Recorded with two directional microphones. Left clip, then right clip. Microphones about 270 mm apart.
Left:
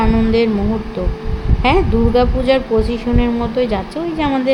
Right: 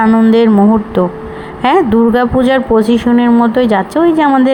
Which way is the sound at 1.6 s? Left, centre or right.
Right.